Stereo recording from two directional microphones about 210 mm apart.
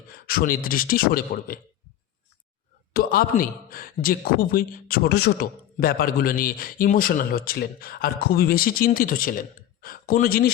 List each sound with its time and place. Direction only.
0.1 s speech: 45° left (ahead or behind)
2.9 s speech: 45° left (ahead or behind)